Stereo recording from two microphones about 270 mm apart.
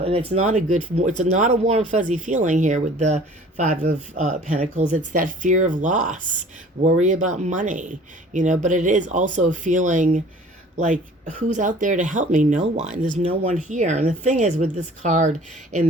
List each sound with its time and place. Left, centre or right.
0.3 s speech: right